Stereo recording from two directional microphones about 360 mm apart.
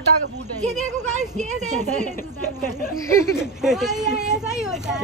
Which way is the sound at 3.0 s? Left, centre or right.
Centre.